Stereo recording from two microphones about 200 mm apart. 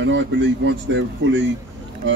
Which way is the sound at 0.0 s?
65° right (ahead or behind).